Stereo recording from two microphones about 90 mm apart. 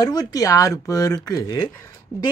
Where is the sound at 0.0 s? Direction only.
45° left (ahead or behind).